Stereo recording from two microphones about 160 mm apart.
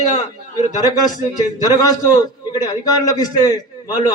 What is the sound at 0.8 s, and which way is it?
A man's voice, 25° left (ahead or behind).